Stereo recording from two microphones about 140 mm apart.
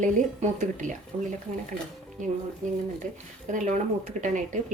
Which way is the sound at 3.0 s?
65° right (ahead or behind).